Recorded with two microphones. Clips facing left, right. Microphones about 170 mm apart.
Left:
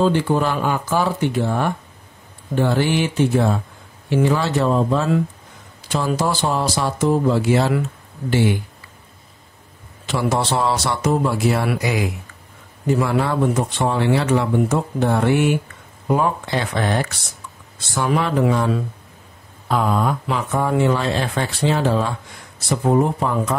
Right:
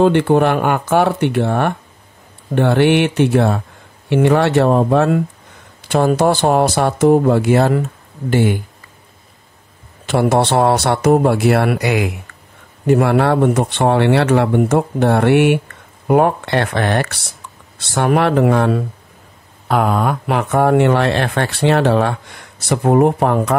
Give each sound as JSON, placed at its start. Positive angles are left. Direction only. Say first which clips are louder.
{"t": 0.0, "sound": "speech", "louder": "right 6 dB", "side_deg": -60}
{"t": 10.0, "sound": "speech", "louder": "right 6 dB", "side_deg": -60}